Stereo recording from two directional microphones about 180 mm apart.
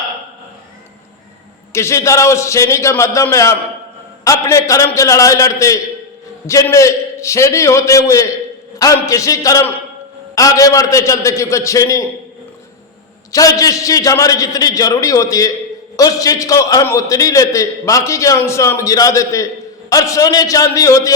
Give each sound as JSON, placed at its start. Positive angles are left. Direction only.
{"t": 1.7, "sound": "a man's voice", "side_deg": 15}
{"t": 13.3, "sound": "a man's voice", "side_deg": 20}